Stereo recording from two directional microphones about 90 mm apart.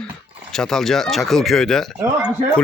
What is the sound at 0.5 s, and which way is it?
A man's voice, 5° left (ahead or behind).